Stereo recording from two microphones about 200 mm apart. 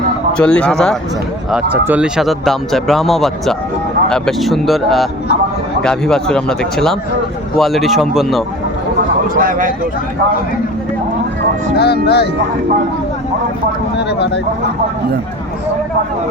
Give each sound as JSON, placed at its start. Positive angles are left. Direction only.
{"t": 0.3, "sound": "speech", "side_deg": 5}
{"t": 9.3, "sound": "speech", "side_deg": -45}
{"t": 11.8, "sound": "speech", "side_deg": 50}